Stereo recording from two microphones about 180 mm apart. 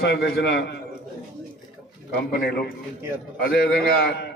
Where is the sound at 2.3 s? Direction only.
60° left (ahead or behind).